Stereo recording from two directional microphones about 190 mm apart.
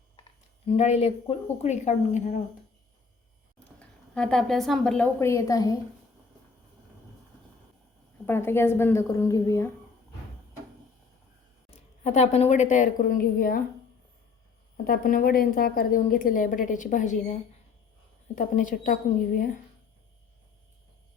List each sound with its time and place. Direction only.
0.2 s speech: 30° left (ahead or behind)
3.8 s a woman's voice: 5° left (ahead or behind)
8.3 s a woman's voice: 10° left (ahead or behind)
11.7 s a woman's voice: 35° left (ahead or behind)
14.8 s a woman's voice: 50° left (ahead or behind)
18.3 s a woman's voice: 40° left (ahead or behind)